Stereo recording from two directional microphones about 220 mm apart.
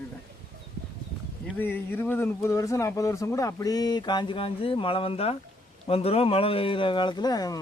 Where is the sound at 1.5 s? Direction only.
10° left (ahead or behind).